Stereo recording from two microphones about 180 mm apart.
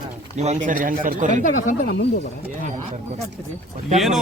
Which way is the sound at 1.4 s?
45° left (ahead or behind).